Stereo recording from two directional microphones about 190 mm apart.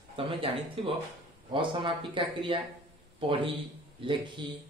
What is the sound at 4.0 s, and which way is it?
Speech, 25° right (ahead or behind).